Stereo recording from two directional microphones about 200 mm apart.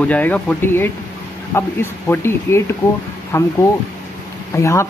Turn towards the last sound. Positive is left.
turn(degrees=15)  # may be behind; listen again after turning